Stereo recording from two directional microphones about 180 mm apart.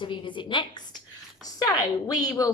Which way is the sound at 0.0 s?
25° left (ahead or behind).